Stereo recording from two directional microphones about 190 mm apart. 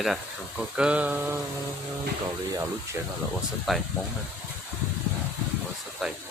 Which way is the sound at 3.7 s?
Centre (ahead or behind).